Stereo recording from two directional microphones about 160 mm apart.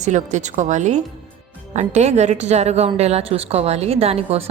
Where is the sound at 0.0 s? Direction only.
50° right (ahead or behind).